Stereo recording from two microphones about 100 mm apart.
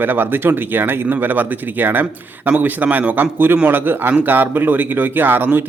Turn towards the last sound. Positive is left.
turn(degrees=-20)  # may be behind; listen again after turning